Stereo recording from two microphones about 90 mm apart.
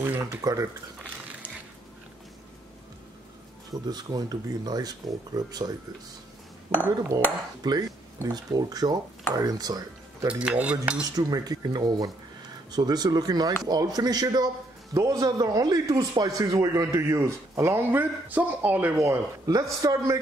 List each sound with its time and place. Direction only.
0.0 s speech: 30° right (ahead or behind)
0.4 s speech: 45° right (ahead or behind)
3.7 s speech: 50° right (ahead or behind)
10.2 s speech: 15° right (ahead or behind)
11.1 s a man's voice: 45° right (ahead or behind); by 18.9 s 20° right (ahead or behind)
19.0 s a man's voice: 40° right (ahead or behind)